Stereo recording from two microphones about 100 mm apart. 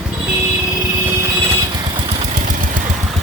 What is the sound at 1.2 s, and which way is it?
Vehicle, 30° right (ahead or behind).